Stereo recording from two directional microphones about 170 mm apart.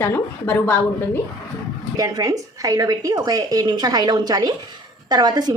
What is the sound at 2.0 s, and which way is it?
A woman's voice, 20° right (ahead or behind).